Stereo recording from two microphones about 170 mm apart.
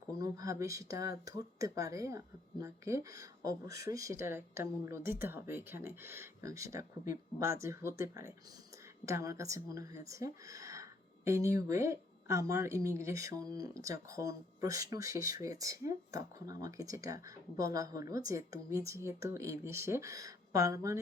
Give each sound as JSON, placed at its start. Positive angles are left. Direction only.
{"t": 0.2, "sound": "speech", "side_deg": -20}